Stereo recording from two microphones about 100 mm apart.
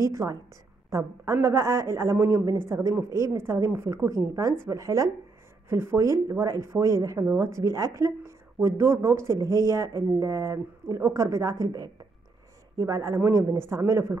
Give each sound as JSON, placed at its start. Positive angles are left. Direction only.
{"t": 0.0, "sound": "a man's voice", "side_deg": -30}